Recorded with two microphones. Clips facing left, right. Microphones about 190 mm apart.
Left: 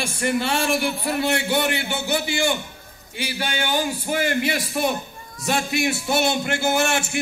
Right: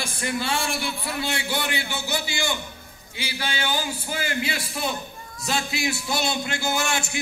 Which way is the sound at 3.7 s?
65° left (ahead or behind).